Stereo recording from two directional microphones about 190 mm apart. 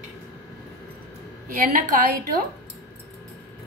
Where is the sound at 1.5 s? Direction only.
45° right (ahead or behind).